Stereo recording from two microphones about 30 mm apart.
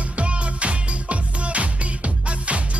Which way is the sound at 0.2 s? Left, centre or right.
Right.